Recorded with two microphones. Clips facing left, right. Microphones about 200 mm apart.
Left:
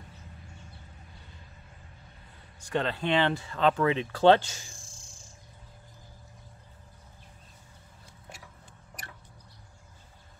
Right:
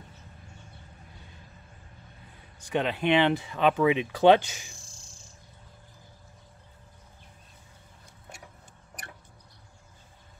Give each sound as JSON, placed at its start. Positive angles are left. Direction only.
{"t": 2.7, "sound": "speech", "side_deg": -15}